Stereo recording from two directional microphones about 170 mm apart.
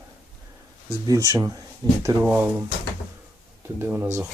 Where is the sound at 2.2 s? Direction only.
10° right (ahead or behind).